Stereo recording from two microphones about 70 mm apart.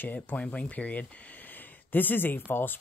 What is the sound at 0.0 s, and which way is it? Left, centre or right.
Speech, left.